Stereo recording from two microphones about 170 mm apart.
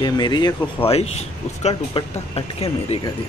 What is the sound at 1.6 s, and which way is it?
Speech, 35° left (ahead or behind).